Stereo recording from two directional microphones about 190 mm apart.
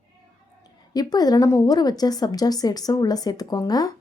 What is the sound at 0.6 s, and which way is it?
Speech, 20° left (ahead or behind).